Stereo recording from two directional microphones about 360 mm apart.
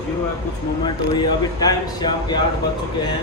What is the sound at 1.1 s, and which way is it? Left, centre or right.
Speech, centre.